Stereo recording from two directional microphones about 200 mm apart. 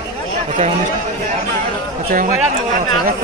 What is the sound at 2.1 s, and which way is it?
Speech, 45° right (ahead or behind).